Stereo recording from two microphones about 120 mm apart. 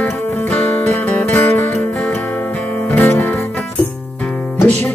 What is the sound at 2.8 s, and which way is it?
Music, 15° left (ahead or behind).